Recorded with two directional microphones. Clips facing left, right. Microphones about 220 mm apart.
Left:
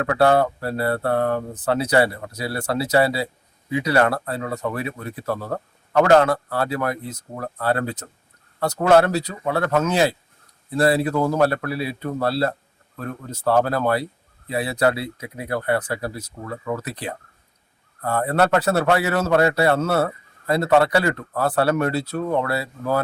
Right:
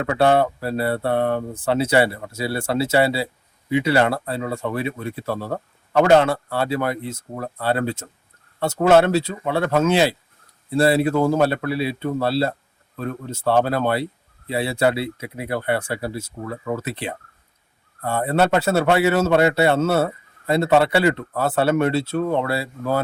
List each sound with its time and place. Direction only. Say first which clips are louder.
0.1 s speech: even; 25° right (ahead or behind)